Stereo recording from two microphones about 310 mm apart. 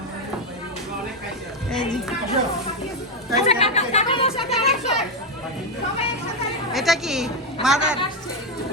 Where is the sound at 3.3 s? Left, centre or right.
Centre.